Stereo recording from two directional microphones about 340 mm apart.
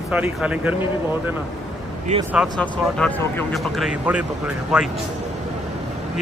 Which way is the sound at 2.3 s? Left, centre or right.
Centre.